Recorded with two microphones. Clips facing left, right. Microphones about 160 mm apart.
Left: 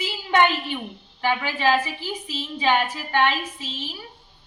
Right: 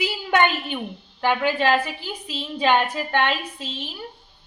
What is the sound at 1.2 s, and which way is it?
A woman's voice, 55° right (ahead or behind).